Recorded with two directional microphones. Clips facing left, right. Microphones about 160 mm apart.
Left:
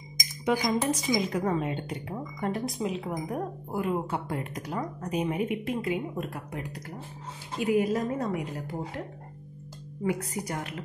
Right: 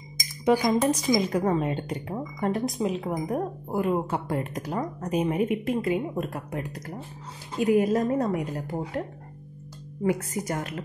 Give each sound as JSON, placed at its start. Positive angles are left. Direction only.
{"t": 0.7, "sound": "a woman's voice", "side_deg": -45}
{"t": 10.4, "sound": "a woman's voice", "side_deg": -45}